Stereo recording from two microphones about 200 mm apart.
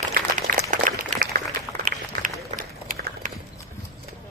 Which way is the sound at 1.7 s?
15° right (ahead or behind).